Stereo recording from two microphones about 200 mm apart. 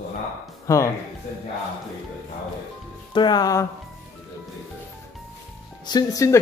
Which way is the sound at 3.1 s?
20° left (ahead or behind).